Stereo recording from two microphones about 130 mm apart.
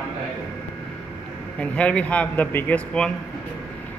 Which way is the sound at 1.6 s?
10° left (ahead or behind).